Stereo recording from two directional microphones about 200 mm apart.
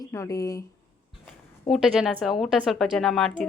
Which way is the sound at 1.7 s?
Centre (ahead or behind).